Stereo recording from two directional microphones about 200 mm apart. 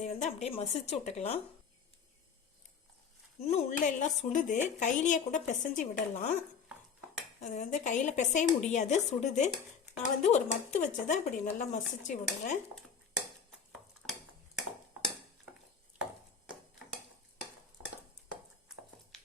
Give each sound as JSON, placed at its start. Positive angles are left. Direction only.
{"t": 0.0, "sound": "speech", "side_deg": 35}
{"t": 3.4, "sound": "speech", "side_deg": 35}
{"t": 7.4, "sound": "speech", "side_deg": 40}
{"t": 19.1, "sound": "a sound", "side_deg": 5}